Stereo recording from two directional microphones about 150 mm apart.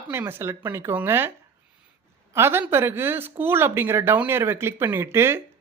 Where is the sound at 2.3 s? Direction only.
15° right (ahead or behind).